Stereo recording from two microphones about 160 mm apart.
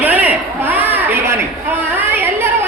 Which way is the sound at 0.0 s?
10° right (ahead or behind).